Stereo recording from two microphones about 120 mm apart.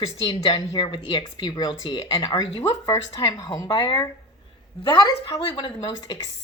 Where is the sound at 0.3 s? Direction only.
50° left (ahead or behind).